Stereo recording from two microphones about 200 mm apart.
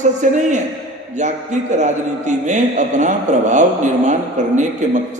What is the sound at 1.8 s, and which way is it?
Speech, 35° right (ahead or behind).